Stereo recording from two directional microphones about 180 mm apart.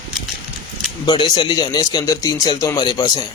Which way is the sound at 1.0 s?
25° left (ahead or behind).